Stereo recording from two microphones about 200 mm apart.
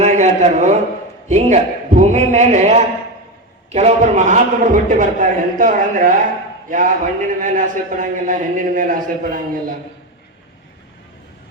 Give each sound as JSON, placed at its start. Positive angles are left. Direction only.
{"t": 0.0, "sound": "a man's voice", "side_deg": -35}